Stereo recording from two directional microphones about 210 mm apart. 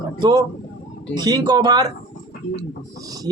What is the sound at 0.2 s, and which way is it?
Speech, 20° right (ahead or behind).